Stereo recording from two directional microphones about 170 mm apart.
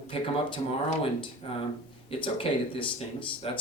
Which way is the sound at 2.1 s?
30° left (ahead or behind).